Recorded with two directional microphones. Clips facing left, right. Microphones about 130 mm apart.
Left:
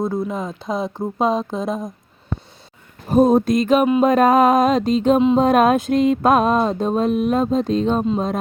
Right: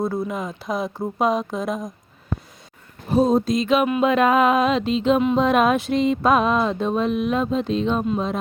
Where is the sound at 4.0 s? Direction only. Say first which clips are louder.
Left 3 dB; 40° left (ahead or behind).